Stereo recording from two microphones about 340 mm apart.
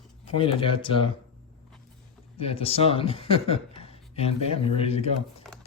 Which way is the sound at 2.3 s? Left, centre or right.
Centre.